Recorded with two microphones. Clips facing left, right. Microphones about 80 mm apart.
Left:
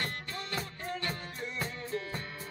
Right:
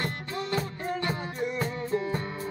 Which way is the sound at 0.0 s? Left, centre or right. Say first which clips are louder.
Right 6 dB; centre.